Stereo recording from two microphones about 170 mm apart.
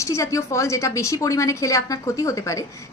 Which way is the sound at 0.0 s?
15° left (ahead or behind).